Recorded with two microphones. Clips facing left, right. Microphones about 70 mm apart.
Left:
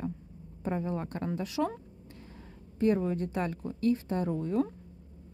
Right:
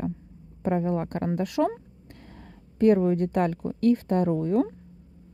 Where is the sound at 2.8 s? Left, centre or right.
Right.